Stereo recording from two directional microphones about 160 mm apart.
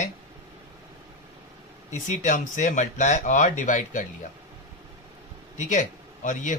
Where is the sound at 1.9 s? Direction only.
55° left (ahead or behind).